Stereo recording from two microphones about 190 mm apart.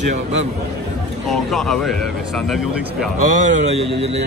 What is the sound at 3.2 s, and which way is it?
A man's voice, 40° right (ahead or behind).